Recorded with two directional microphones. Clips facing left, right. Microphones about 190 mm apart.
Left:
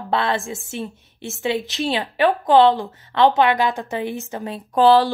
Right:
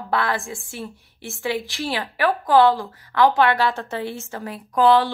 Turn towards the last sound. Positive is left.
turn(degrees=30)  # may be behind; listen again after turning